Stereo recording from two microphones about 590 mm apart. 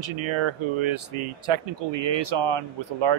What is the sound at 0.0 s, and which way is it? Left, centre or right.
Speech, right.